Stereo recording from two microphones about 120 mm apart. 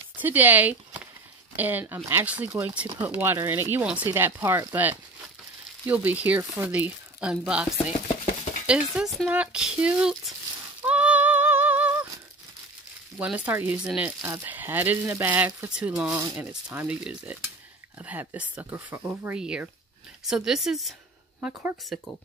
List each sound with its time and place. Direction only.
0.2 s speech: 15° right (ahead or behind)
8.6 s speech: 10° right (ahead or behind)
10.8 s a sound: 10° right (ahead or behind)
13.2 s speech: 15° right (ahead or behind)
14.2 s speech: 20° right (ahead or behind); by 22.0 s centre (ahead or behind)